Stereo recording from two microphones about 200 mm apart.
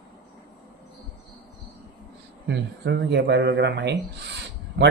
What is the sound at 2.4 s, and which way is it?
Speech, 60° right (ahead or behind).